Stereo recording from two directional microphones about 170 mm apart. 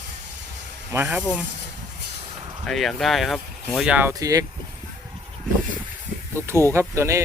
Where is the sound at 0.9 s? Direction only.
15° right (ahead or behind).